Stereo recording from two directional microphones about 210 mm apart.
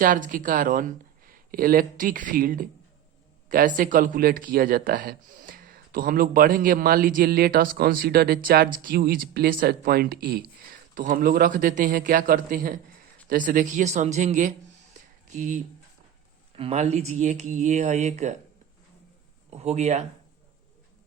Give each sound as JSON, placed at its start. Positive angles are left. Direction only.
{"t": 0.0, "sound": "speech", "side_deg": -40}
{"t": 19.5, "sound": "speech", "side_deg": -30}